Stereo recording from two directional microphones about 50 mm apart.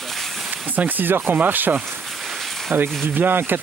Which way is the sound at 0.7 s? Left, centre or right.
Right.